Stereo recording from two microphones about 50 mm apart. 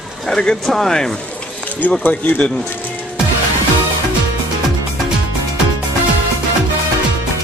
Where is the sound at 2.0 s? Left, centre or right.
Left.